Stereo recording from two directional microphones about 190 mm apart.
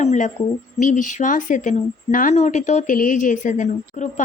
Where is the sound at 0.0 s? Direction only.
35° left (ahead or behind).